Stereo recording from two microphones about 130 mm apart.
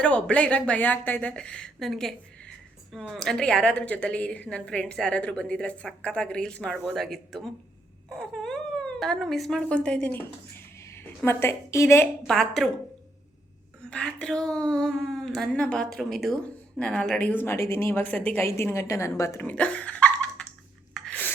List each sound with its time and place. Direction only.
0.0 s a woman's voice: 10° left (ahead or behind)
12.3 s speech: 5° left (ahead or behind)
13.9 s speech: 5° left (ahead or behind)
20.9 s a sound: 5° left (ahead or behind)